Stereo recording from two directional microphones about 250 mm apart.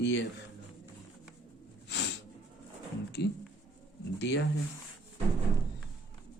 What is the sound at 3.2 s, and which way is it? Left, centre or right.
Speech, left.